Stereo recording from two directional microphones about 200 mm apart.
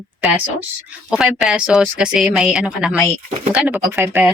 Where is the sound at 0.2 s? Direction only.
5° right (ahead or behind).